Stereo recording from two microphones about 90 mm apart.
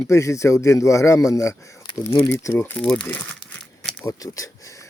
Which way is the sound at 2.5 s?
20° left (ahead or behind).